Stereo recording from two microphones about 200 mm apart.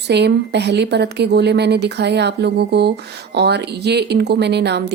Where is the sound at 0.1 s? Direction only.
55° right (ahead or behind).